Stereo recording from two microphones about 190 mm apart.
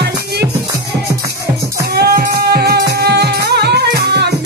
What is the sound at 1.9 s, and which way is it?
Music, 55° right (ahead or behind).